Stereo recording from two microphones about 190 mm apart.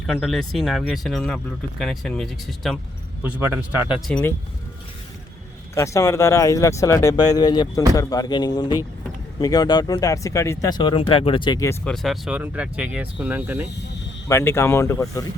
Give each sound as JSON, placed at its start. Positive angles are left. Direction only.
{"t": 0.0, "sound": "speech", "side_deg": 0}
{"t": 3.9, "sound": "speech", "side_deg": 0}
{"t": 5.7, "sound": "speech", "side_deg": 15}
{"t": 11.9, "sound": "speech", "side_deg": 0}
{"t": 14.3, "sound": "speech", "side_deg": 15}